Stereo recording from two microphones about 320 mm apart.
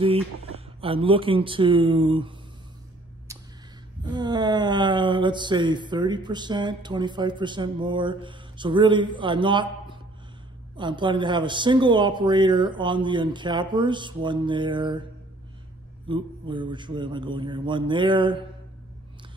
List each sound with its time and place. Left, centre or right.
0.0 s speech: centre
3.3 s a sound: centre
4.0 s speech: centre
16.1 s speech: centre